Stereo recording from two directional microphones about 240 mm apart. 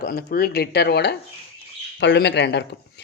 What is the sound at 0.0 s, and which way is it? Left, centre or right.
A woman's voice, left.